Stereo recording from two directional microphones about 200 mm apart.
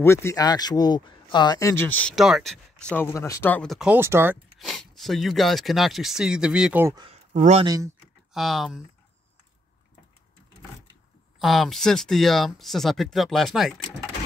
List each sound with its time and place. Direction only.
0.0 s speech: 15° left (ahead or behind); by 4.4 s 10° right (ahead or behind)
4.6 s speech: centre (ahead or behind)
7.3 s speech: 35° right (ahead or behind)
7.6 s speech: 15° right (ahead or behind)
8.3 s speech: centre (ahead or behind)
11.3 s speech: centre (ahead or behind)